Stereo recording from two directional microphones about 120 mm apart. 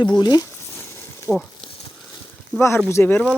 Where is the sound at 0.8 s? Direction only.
20° left (ahead or behind).